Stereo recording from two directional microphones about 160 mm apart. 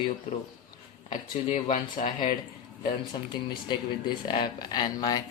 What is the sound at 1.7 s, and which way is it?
Speech, 55° left (ahead or behind).